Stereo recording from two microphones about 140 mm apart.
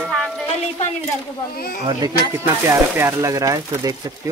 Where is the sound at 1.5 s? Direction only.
90° left.